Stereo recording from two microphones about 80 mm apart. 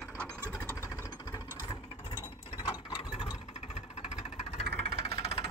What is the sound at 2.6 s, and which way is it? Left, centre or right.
Vehicle, left.